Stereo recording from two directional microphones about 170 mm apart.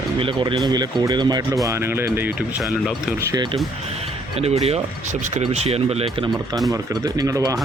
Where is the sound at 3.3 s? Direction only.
25° right (ahead or behind).